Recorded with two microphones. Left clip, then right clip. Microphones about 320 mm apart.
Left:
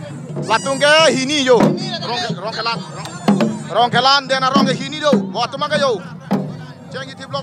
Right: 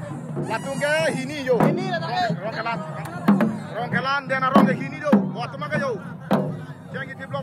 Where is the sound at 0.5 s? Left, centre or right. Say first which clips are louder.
Left 11 dB; left.